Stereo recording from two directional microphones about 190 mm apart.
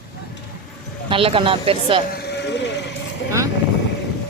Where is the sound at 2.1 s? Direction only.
60° left (ahead or behind).